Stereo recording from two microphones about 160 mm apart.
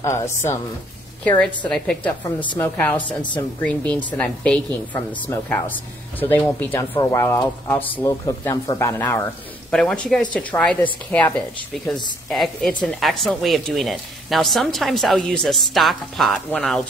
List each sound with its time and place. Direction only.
0.0 s a woman's voice: 20° left (ahead or behind)
8.1 s a woman's voice: 20° left (ahead or behind)
9.7 s speech: 5° left (ahead or behind)